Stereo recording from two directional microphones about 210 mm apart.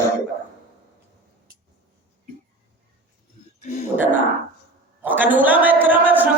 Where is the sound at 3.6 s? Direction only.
35° left (ahead or behind).